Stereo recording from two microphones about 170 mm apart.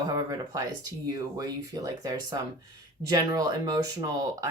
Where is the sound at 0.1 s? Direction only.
20° right (ahead or behind).